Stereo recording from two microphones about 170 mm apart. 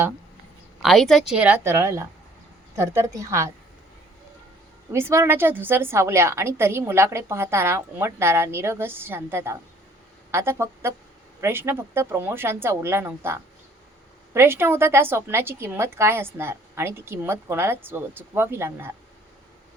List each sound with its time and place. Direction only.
0.8 s a woman's voice: centre (ahead or behind)
1.4 s a woman's voice: 10° right (ahead or behind)
4.9 s a woman's voice: 15° right (ahead or behind)